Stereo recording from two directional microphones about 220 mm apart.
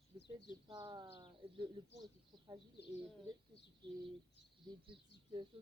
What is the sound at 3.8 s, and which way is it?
Speech, 20° right (ahead or behind).